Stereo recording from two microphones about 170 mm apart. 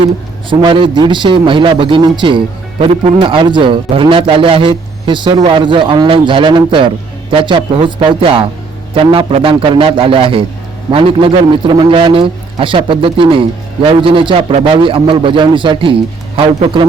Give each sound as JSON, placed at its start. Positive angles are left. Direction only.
{"t": 0.6, "sound": "a man's voice", "side_deg": -25}